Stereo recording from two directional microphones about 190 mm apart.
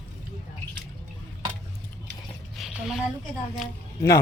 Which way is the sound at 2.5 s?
Centre (ahead or behind).